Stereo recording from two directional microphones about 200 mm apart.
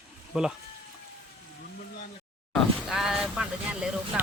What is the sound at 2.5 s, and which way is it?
Speech, centre (ahead or behind).